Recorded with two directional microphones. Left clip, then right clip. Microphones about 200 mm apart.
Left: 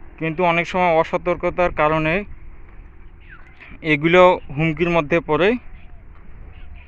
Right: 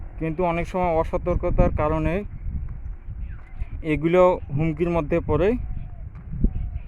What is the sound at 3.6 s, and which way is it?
Speech, centre (ahead or behind).